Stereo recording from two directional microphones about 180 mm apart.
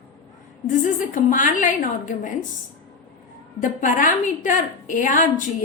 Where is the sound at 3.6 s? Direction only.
45° left (ahead or behind).